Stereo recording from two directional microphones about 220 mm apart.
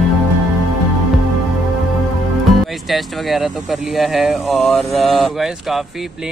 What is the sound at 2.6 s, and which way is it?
Speech, centre (ahead or behind).